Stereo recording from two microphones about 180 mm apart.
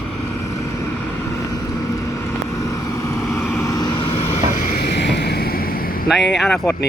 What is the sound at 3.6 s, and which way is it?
Vehicle, 20° left (ahead or behind).